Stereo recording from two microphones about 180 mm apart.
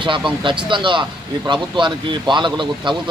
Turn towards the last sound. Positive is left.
turn(degrees=-25)  # may be behind; listen again after turning